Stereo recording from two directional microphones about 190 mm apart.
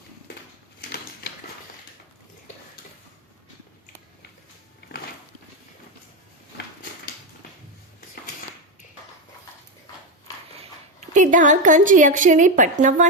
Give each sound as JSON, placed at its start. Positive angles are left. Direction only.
{"t": 10.6, "sound": "speech", "side_deg": -40}